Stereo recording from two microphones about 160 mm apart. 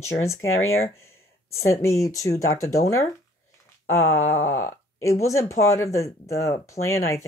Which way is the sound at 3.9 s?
15° left (ahead or behind).